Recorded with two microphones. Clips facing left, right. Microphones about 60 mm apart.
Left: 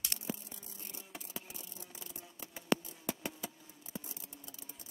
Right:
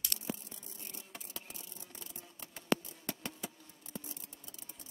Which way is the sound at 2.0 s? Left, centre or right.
Centre.